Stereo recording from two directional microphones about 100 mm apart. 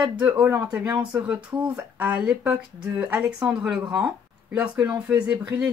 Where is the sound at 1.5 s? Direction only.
35° right (ahead or behind).